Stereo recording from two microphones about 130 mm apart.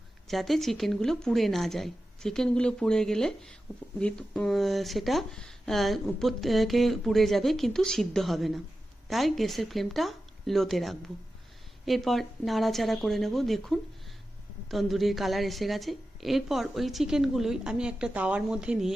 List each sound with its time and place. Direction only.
0.3 s speech: centre (ahead or behind)